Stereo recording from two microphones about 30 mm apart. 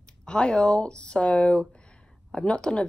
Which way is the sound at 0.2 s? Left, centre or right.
Left.